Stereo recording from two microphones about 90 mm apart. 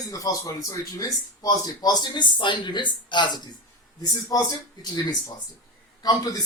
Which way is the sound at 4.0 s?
45° left (ahead or behind).